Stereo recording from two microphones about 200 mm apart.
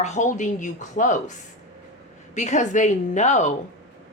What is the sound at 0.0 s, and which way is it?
Speech, 35° left (ahead or behind).